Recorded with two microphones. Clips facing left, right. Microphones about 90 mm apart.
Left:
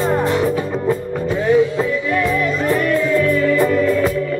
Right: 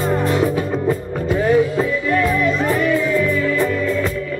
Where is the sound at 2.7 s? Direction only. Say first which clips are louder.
Left 1 dB; 5° right (ahead or behind).